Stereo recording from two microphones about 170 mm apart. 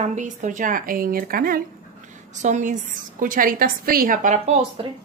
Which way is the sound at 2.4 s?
45° right (ahead or behind).